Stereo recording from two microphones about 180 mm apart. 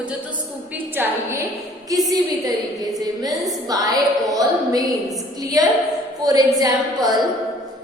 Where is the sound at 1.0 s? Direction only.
10° right (ahead or behind).